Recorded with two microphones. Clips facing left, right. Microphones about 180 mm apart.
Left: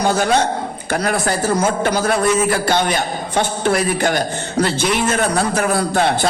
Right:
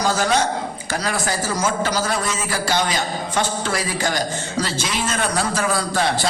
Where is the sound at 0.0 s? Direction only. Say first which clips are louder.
Left 3 dB; 60° left (ahead or behind).